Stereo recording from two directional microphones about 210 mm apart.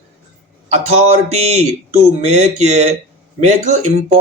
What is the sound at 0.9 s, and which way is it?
Speech, 30° right (ahead or behind).